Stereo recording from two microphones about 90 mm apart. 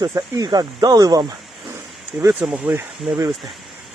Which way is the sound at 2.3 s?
10° right (ahead or behind).